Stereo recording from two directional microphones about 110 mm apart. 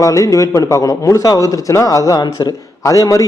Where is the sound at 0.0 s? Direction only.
30° left (ahead or behind).